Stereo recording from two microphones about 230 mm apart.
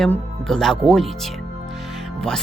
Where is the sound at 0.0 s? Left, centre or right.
Centre.